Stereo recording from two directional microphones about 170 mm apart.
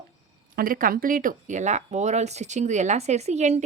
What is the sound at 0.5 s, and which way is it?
A woman's voice, 55° right (ahead or behind).